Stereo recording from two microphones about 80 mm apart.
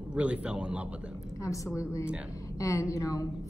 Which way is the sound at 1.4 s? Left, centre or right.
Left.